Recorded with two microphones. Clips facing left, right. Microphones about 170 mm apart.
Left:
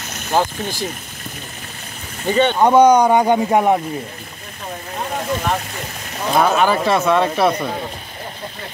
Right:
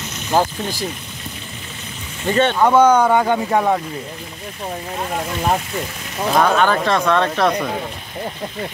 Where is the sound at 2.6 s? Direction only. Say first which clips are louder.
Left 2 dB; 15° left (ahead or behind).